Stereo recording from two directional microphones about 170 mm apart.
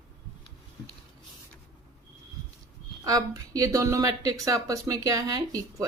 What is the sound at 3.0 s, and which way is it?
A woman's voice, 20° right (ahead or behind).